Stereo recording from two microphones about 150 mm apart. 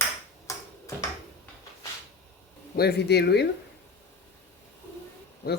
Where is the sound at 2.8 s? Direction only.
90° left.